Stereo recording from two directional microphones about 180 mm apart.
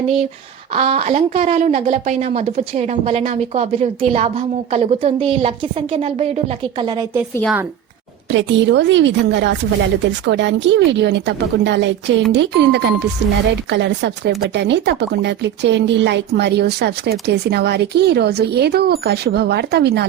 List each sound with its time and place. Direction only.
0.7 s speech: 35° right (ahead or behind)
7.4 s a woman's voice: 10° right (ahead or behind)
8.3 s speech: 90° right; by 20.1 s 65° right (ahead or behind)